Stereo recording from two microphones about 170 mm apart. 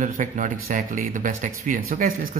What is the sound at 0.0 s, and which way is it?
Speech, 50° right (ahead or behind).